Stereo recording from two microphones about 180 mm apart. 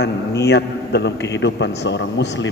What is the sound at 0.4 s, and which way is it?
A man's voice, 70° left (ahead or behind).